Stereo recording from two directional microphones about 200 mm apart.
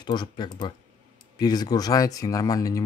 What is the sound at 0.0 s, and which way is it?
Speech, 20° left (ahead or behind).